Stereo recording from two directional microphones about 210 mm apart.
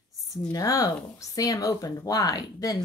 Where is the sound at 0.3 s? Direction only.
15° left (ahead or behind).